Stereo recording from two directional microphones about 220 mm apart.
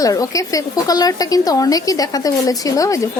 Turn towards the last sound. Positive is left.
turn(degrees=15)  # may be behind; listen again after turning